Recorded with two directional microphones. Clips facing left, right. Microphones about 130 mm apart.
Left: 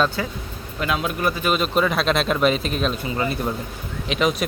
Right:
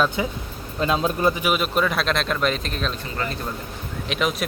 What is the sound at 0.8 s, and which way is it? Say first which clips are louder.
Speech: right 2 dB; 30° right (ahead or behind).